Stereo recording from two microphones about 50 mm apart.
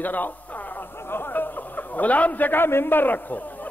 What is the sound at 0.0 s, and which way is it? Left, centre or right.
Speech, left.